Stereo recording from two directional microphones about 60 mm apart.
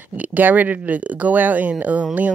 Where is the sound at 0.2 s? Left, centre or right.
Right.